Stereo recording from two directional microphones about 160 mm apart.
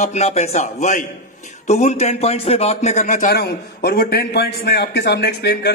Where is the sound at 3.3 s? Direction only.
75° left (ahead or behind); by 5.7 s 90° left.